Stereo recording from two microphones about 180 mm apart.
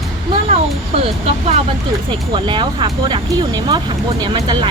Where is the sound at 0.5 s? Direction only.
35° right (ahead or behind).